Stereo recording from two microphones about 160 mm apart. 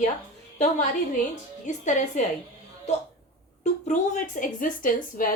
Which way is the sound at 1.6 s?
50° left (ahead or behind).